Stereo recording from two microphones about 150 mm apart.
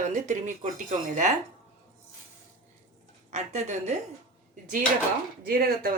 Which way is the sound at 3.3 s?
50° right (ahead or behind).